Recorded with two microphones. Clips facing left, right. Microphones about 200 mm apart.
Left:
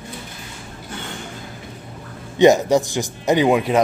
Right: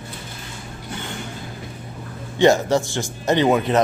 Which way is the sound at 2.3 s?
15° left (ahead or behind).